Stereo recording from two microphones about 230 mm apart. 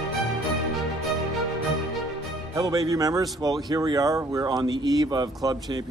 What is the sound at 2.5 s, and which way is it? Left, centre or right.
Speech, centre.